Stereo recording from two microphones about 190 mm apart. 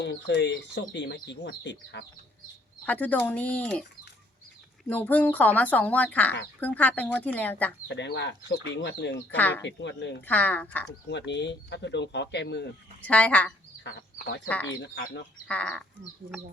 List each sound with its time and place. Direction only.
0.0 s speech: 65° left (ahead or behind)
2.8 s speech: 10° left (ahead or behind)
4.9 s speech: 10° left (ahead or behind)
7.9 s speech: 65° left (ahead or behind)
9.3 s speech: 10° left (ahead or behind)
9.6 s speech: 70° left (ahead or behind)
10.2 s speech: 10° left (ahead or behind)
11.1 s speech: 65° left (ahead or behind)
13.0 s speech: 5° left (ahead or behind)
13.8 s speech: 65° left (ahead or behind)
14.4 s speech: 5° left (ahead or behind)
14.7 s speech: 60° left (ahead or behind)
15.4 s speech: 5° left (ahead or behind)